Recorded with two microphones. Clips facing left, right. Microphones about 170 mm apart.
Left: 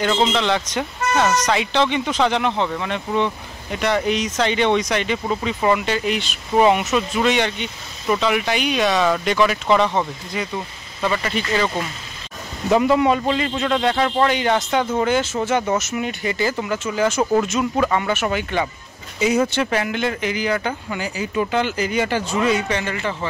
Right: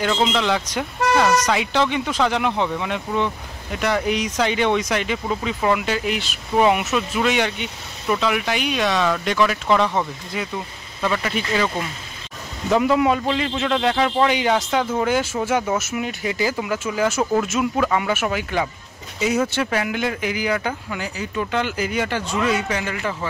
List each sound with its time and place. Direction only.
0.0 s speech: 5° right (ahead or behind)